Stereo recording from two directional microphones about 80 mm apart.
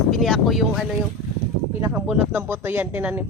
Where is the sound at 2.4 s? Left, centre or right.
Right.